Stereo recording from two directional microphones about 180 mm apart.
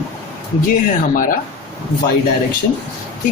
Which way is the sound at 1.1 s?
50° left (ahead or behind).